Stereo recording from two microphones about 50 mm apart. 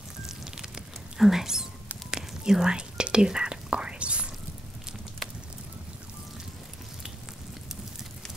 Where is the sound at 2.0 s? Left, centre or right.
Centre.